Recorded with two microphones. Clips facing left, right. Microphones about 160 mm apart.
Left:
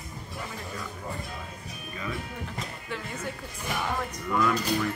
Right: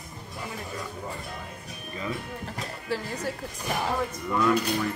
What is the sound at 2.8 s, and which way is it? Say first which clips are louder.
Speech: right 7 dB; 35° right (ahead or behind).